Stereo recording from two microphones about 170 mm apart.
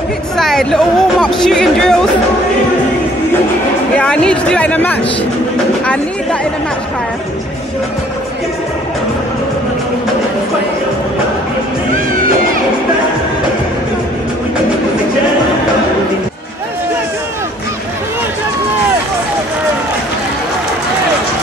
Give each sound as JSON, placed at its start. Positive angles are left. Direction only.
{"t": 0.4, "sound": "speech", "side_deg": 0}
{"t": 3.9, "sound": "speech", "side_deg": 5}
{"t": 11.9, "sound": "music", "side_deg": -55}